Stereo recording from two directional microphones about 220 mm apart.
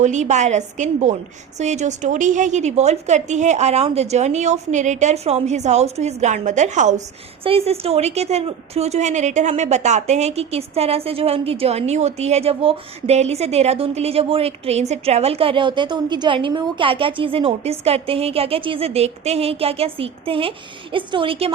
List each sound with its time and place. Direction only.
0.0 s a woman's voice: 35° right (ahead or behind)